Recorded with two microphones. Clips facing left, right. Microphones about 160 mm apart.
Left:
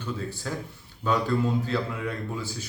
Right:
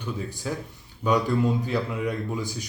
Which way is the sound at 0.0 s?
15° right (ahead or behind).